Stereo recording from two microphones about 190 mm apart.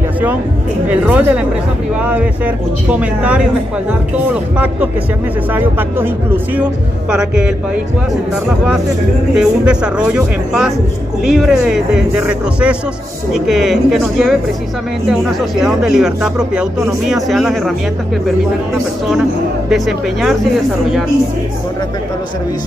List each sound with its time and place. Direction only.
0.8 s speech: 5° right (ahead or behind)
9.3 s speech: 5° right (ahead or behind)
19.7 s speech: centre (ahead or behind)